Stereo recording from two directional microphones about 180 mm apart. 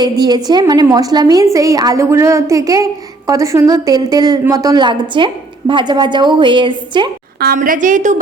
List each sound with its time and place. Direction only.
0.0 s a woman's voice: 25° right (ahead or behind)
7.3 s a woman's voice: 55° right (ahead or behind)